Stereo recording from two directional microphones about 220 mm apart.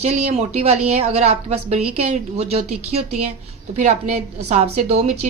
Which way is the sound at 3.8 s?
30° right (ahead or behind).